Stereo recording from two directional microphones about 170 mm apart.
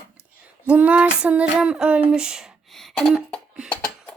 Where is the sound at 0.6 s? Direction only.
10° right (ahead or behind).